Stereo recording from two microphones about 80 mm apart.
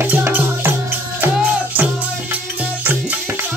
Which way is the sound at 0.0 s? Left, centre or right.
Right.